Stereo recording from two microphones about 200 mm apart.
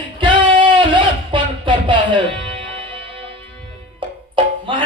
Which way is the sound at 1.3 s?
25° right (ahead or behind).